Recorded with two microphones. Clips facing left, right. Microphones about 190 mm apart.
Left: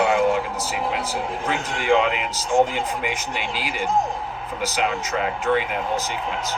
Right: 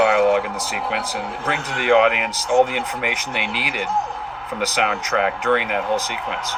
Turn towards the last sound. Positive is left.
turn(degrees=-65)  # may be behind; listen again after turning